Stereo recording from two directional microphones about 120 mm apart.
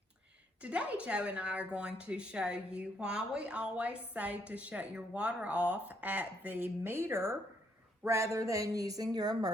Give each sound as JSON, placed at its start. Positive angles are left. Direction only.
{"t": 0.6, "sound": "a woman's voice", "side_deg": -10}